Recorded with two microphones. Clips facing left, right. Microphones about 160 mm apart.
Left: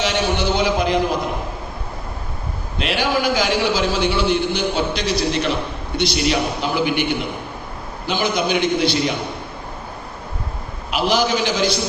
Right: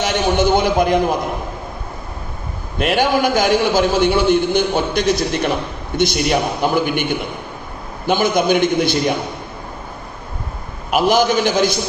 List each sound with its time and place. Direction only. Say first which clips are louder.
0.0 s a man's voice: right 4 dB; 50° right (ahead or behind)
2.7 s a man's voice: right 4 dB; 50° right (ahead or behind)
8.0 s a man's voice: right 5 dB; 50° right (ahead or behind)
10.9 s a man's voice: right 4 dB; 50° right (ahead or behind)